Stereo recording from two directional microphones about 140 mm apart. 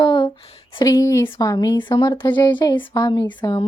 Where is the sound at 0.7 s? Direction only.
25° left (ahead or behind).